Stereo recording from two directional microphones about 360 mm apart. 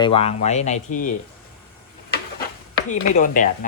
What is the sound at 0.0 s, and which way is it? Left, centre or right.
Speech, centre.